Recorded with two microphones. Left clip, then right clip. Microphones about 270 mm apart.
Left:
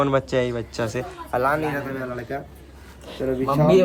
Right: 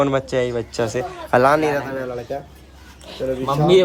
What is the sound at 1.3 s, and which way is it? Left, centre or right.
Speech, right.